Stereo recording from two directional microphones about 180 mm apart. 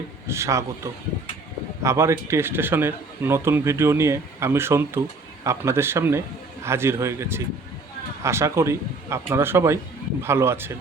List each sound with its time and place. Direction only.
0.3 s speech: 15° right (ahead or behind)
1.8 s speech: 15° right (ahead or behind)